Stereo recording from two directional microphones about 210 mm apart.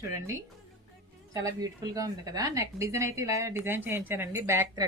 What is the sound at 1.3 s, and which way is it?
Speech, 15° right (ahead or behind).